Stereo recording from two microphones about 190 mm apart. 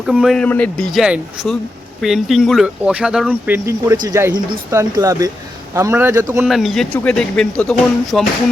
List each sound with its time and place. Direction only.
0.0 s speech: centre (ahead or behind)
6.4 s speech: centre (ahead or behind)